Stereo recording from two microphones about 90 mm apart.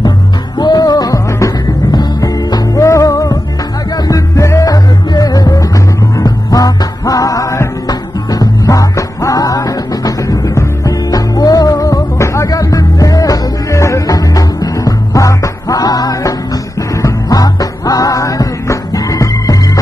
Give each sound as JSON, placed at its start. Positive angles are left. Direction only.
{"t": 0.6, "sound": "music", "side_deg": 50}
{"t": 1.9, "sound": "music", "side_deg": 50}